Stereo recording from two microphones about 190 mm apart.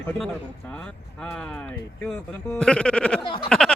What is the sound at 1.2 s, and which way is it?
Speech, 5° left (ahead or behind).